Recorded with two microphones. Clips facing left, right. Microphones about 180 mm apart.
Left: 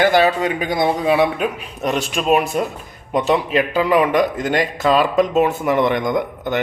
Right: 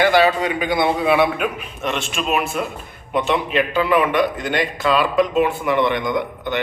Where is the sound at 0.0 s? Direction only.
45° left (ahead or behind).